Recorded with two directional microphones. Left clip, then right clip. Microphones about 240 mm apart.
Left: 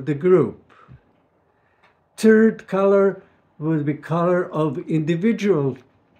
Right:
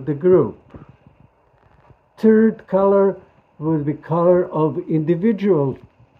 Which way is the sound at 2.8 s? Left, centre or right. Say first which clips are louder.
Right 1 dB; centre.